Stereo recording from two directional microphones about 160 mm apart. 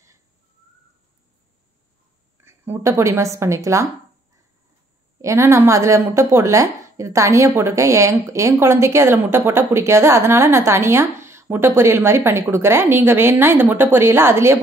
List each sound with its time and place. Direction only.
2.4 s a woman's voice: 15° right (ahead or behind)
5.2 s a woman's voice: 20° right (ahead or behind)